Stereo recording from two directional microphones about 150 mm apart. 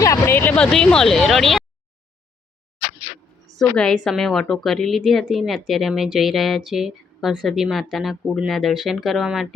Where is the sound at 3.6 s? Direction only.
5° left (ahead or behind).